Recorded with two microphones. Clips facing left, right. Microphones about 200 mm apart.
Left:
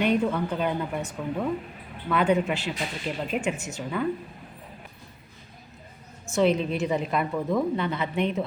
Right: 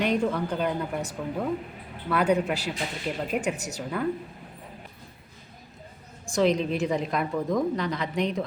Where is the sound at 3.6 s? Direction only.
40° right (ahead or behind).